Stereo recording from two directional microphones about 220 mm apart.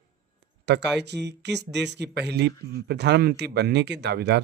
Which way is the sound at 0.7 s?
50° right (ahead or behind).